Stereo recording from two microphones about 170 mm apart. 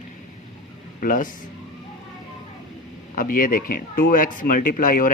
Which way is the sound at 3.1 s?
55° left (ahead or behind).